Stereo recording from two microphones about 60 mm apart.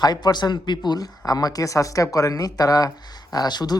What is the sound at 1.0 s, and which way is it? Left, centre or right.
Speech, left.